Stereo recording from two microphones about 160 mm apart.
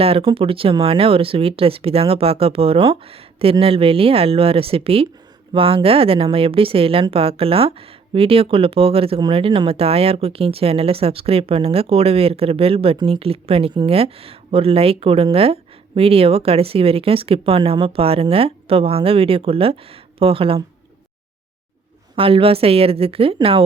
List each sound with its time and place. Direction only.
0.0 s speech: 35° right (ahead or behind)
22.1 s speech: 35° right (ahead or behind)